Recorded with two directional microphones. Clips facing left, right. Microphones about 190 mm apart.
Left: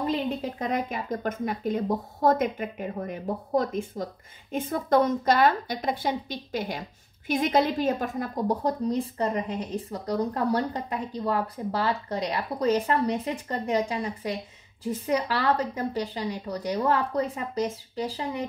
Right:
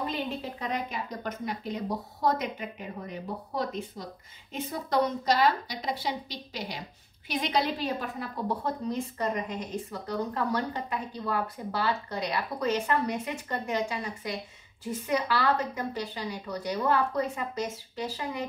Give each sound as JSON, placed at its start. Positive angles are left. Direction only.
{"t": 0.3, "sound": "a woman's voice", "side_deg": 45}